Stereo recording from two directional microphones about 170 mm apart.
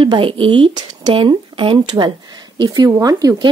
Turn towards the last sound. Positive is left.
turn(degrees=-20)  # may be behind; listen again after turning